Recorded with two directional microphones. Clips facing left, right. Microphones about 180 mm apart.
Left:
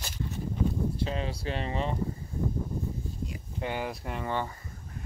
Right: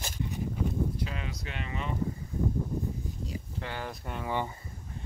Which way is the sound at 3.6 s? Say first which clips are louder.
Left 6 dB; 15° left (ahead or behind).